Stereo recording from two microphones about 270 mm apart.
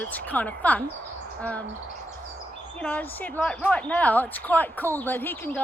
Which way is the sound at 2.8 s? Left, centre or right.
Centre.